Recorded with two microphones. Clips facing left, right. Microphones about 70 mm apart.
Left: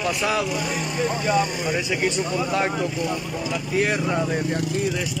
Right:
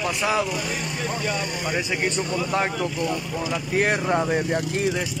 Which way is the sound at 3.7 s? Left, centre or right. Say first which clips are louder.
Right 1 dB; right.